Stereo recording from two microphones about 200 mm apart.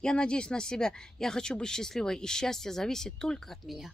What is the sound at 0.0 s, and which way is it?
Speech, 5° left (ahead or behind).